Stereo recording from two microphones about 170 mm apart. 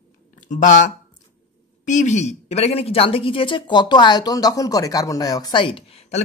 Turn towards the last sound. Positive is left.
turn(degrees=40)  # may be behind; listen again after turning